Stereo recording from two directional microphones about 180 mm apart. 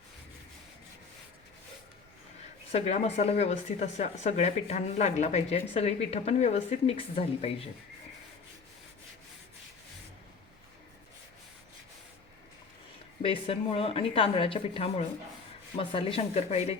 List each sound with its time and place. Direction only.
2.7 s speech: 35° left (ahead or behind)
13.2 s speech: 30° left (ahead or behind)